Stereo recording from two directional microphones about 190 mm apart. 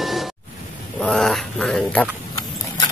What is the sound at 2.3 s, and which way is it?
Clip-clop, 20° left (ahead or behind).